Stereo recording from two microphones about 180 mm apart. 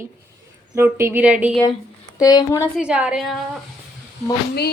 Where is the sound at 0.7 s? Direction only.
15° right (ahead or behind).